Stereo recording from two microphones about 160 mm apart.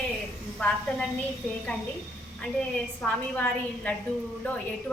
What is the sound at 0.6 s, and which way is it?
Speech, 5° left (ahead or behind).